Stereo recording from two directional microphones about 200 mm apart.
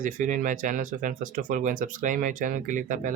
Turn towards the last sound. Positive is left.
turn(degrees=-40)  # may be behind; listen again after turning